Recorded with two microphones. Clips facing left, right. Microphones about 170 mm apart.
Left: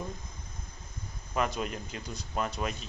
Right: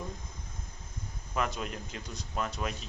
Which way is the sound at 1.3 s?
5° left (ahead or behind).